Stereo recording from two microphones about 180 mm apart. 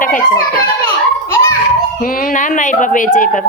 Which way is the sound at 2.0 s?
50° left (ahead or behind).